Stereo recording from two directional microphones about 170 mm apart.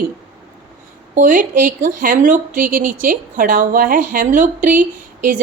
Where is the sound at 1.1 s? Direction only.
50° right (ahead or behind).